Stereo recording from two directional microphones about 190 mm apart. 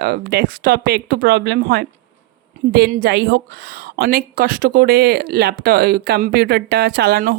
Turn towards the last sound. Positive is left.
turn(degrees=-55)  # may be behind; listen again after turning